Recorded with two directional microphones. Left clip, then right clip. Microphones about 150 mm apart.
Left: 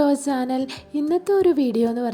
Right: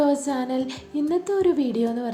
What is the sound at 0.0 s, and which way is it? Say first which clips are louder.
A woman's voice: left 2 dB; 50° left (ahead or behind).